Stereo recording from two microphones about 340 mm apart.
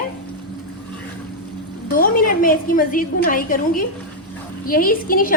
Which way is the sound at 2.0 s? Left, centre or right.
Left.